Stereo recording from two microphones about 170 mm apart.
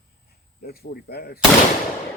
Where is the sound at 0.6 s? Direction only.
65° left (ahead or behind).